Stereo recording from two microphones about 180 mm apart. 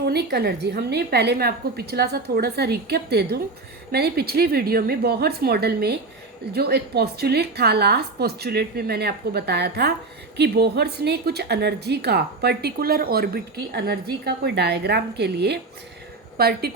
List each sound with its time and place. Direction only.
0.0 s a woman's voice: 65° right (ahead or behind)